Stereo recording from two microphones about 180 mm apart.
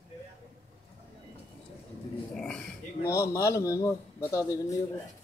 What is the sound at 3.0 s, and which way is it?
A man's voice, 15° left (ahead or behind).